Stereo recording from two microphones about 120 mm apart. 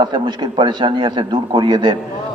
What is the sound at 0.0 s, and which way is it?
A man's voice, 40° right (ahead or behind).